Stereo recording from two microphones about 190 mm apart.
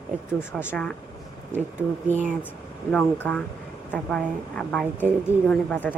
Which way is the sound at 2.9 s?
5° left (ahead or behind).